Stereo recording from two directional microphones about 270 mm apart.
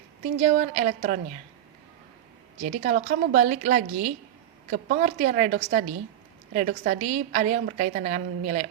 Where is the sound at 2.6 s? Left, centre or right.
Right.